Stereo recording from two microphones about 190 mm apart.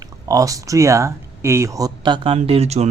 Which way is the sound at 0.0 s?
20° right (ahead or behind).